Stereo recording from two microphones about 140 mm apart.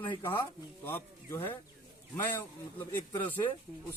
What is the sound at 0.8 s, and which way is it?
Speech, 20° left (ahead or behind).